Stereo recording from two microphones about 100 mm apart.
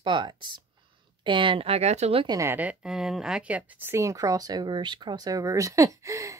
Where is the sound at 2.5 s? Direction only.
10° right (ahead or behind); by 6.3 s 30° right (ahead or behind).